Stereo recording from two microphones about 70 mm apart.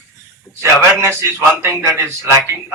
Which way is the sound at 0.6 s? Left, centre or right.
Right.